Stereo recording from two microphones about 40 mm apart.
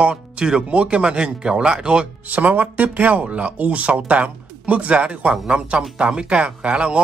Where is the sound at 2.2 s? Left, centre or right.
Right.